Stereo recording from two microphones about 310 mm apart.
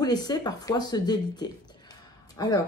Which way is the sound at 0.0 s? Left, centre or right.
Centre.